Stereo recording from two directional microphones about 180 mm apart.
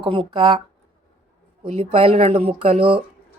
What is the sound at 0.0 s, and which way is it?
Speech, 30° right (ahead or behind).